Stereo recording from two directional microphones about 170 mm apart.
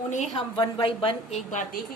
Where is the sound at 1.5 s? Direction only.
50° left (ahead or behind).